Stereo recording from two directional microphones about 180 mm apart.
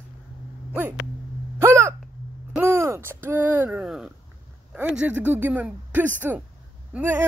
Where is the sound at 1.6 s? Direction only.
15° right (ahead or behind).